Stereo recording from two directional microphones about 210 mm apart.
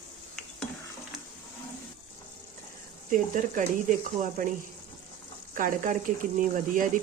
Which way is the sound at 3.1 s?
40° right (ahead or behind).